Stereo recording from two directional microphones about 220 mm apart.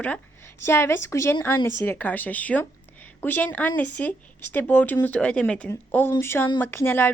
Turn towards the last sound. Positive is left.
turn(degrees=10)  # may be behind; listen again after turning